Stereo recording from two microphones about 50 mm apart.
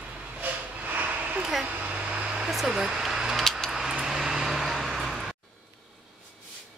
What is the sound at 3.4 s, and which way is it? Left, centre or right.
Keys jangling, centre.